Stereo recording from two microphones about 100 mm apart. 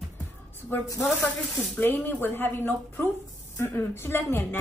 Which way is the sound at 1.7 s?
20° left (ahead or behind).